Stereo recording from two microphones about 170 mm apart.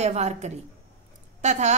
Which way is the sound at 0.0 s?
40° right (ahead or behind).